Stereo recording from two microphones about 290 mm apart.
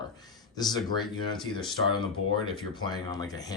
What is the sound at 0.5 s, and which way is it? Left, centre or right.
Speech, centre.